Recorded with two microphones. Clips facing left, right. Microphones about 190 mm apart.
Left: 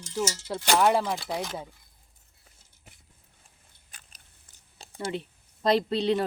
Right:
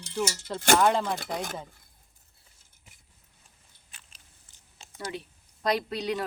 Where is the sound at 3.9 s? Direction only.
40° left (ahead or behind).